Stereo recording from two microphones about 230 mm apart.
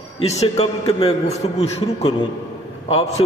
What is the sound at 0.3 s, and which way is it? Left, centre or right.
A man's voice, left.